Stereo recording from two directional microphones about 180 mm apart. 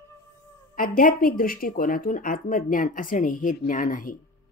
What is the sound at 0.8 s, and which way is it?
Speech, 50° left (ahead or behind).